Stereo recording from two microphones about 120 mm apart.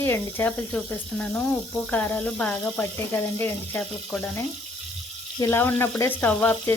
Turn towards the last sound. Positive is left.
turn(degrees=15)  # may be behind; listen again after turning